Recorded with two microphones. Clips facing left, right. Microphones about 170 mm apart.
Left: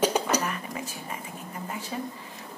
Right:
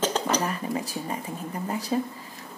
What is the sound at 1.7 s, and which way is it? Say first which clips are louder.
Speech: right 8 dB; 40° right (ahead or behind).